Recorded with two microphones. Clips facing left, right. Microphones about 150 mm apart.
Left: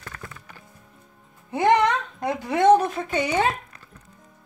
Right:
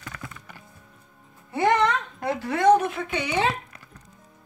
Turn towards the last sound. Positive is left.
turn(degrees=40)  # may be behind; listen again after turning